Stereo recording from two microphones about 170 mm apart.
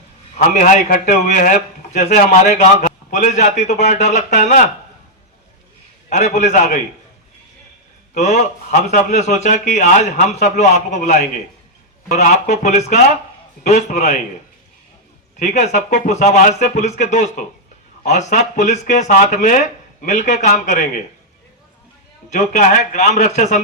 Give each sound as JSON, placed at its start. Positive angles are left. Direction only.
{"t": 0.4, "sound": "a man's voice", "side_deg": 50}
{"t": 6.1, "sound": "a man's voice", "side_deg": 45}
{"t": 8.2, "sound": "a man's voice", "side_deg": 40}
{"t": 15.4, "sound": "a man's voice", "side_deg": 45}
{"t": 22.3, "sound": "a man's voice", "side_deg": 45}